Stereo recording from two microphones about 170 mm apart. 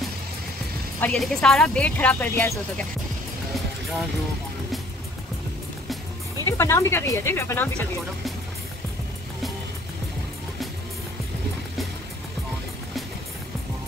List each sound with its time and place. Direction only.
1.0 s speech: 5° left (ahead or behind)
6.4 s speech: 15° left (ahead or behind)